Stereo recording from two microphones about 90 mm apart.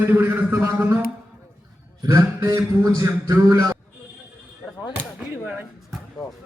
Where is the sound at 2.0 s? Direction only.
35° right (ahead or behind).